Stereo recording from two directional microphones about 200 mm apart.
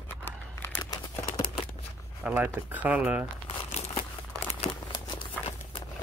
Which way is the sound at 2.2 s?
5° right (ahead or behind).